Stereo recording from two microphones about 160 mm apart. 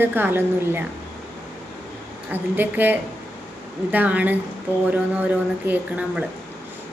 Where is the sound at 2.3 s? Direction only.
10° right (ahead or behind).